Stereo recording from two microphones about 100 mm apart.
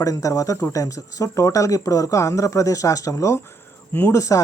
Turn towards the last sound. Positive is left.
turn(degrees=30)  # may be behind; listen again after turning